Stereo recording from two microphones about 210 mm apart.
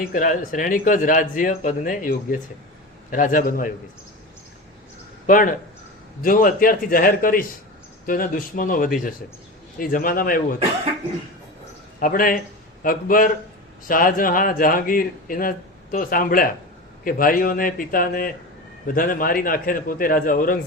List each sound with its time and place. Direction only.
0.1 s a man's voice: 40° left (ahead or behind)
5.2 s a man's voice: 40° left (ahead or behind)
11.9 s a man's voice: 40° left (ahead or behind)